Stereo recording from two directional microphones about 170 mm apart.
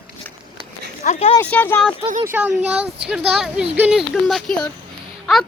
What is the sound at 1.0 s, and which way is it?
Speech, 35° left (ahead or behind).